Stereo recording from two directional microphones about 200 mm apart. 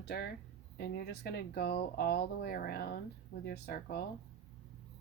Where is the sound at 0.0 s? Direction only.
55° left (ahead or behind).